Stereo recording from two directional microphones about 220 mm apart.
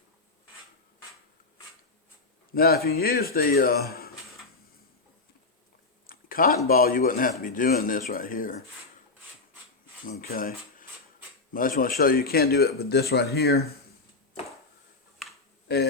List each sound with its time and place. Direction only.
2.6 s speech: 45° left (ahead or behind)
6.1 s a sound: 40° left (ahead or behind)
6.7 s speech: 40° left (ahead or behind)
10.1 s speech: 40° left (ahead or behind)